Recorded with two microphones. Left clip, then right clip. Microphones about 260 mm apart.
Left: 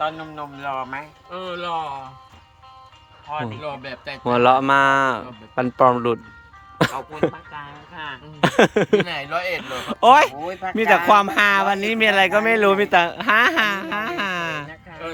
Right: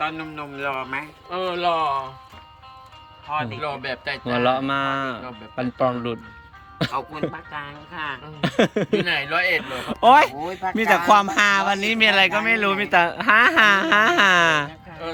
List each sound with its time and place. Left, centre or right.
0.0 s speech: left
1.5 s speech: centre
3.3 s speech: centre
3.6 s a man's voice: centre
4.3 s speech: centre